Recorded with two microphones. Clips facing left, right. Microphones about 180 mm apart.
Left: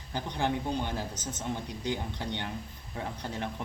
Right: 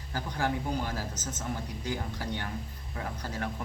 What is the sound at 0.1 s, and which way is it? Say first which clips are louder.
A man's voice: left 1 dB; 25° left (ahead or behind).